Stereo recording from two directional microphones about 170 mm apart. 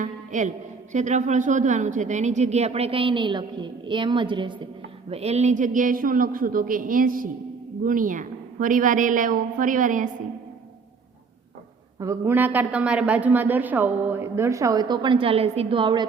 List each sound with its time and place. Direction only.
0.0 s a sound: 45° right (ahead or behind)
0.9 s a woman's voice: 45° right (ahead or behind)
11.9 s a man's voice: 15° right (ahead or behind)